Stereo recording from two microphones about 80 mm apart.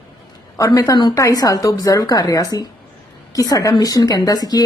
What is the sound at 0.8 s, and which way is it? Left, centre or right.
Speech, left.